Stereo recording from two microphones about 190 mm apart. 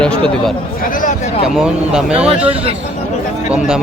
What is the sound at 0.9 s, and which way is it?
Speech, 45° left (ahead or behind).